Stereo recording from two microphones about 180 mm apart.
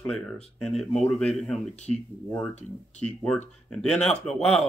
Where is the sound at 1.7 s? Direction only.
40° left (ahead or behind).